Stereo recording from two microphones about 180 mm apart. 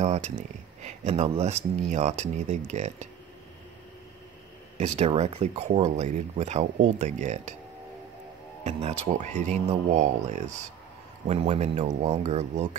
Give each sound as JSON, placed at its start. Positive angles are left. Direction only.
{"t": 0.0, "sound": "a sound", "side_deg": -40}
{"t": 0.8, "sound": "speech", "side_deg": -35}
{"t": 4.7, "sound": "speech", "side_deg": -35}
{"t": 8.6, "sound": "speech", "side_deg": -40}